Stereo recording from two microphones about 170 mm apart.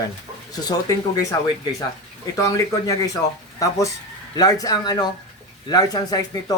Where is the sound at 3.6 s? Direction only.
20° left (ahead or behind).